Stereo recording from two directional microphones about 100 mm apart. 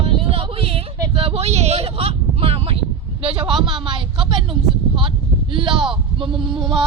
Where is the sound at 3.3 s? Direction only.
60° right (ahead or behind).